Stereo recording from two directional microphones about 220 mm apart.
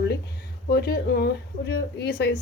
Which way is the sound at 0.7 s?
45° left (ahead or behind).